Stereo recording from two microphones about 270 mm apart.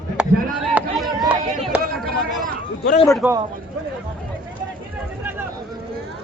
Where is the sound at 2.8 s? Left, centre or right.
Left.